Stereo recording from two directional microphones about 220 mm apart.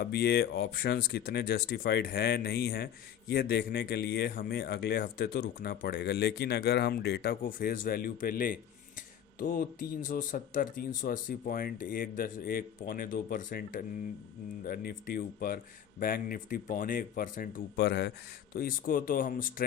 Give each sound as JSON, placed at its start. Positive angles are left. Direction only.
{"t": 0.0, "sound": "speech", "side_deg": 45}